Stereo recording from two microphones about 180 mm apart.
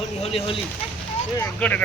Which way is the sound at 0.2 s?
30° left (ahead or behind).